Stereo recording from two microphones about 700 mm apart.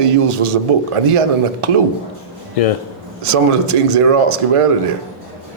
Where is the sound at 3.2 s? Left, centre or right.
Right.